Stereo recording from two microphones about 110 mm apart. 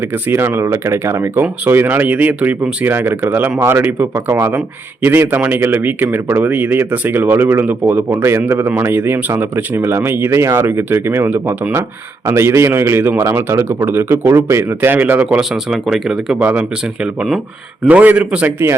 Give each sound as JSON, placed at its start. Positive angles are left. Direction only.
{"t": 0.3, "sound": "a man's voice", "side_deg": -20}